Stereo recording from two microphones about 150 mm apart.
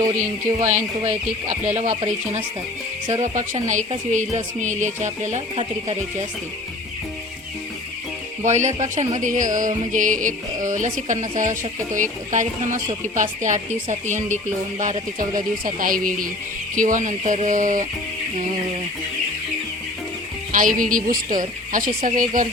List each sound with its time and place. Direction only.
0.0 s speech: 20° right (ahead or behind)
0.7 s speech: 50° right (ahead or behind)
3.2 s speech: 55° right (ahead or behind)
8.4 s speech: 50° right (ahead or behind)
15.6 s speech: 65° right (ahead or behind)
20.5 s speech: 65° right (ahead or behind)